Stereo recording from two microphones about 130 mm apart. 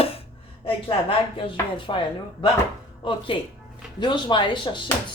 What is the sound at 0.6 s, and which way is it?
Speech, 45° left (ahead or behind).